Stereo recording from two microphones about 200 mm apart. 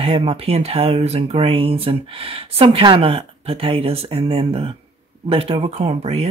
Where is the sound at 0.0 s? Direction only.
30° right (ahead or behind).